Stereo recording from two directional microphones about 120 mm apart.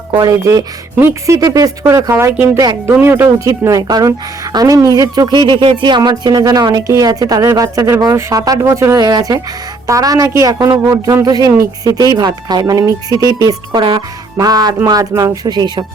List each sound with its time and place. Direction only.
0.1 s speech: 35° right (ahead or behind)
0.9 s speech: 20° right (ahead or behind)
1.4 s speech: 30° right (ahead or behind)